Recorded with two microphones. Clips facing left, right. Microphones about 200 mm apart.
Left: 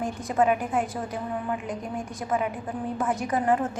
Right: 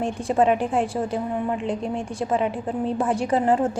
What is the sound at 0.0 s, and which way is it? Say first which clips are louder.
A woman's voice: right 4 dB; 30° right (ahead or behind).